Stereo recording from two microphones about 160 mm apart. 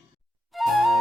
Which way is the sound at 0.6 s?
Centre (ahead or behind).